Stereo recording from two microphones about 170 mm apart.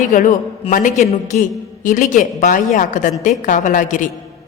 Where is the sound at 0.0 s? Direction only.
50° left (ahead or behind).